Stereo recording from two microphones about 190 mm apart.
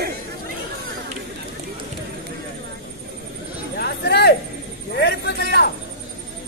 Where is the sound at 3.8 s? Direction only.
60° left (ahead or behind).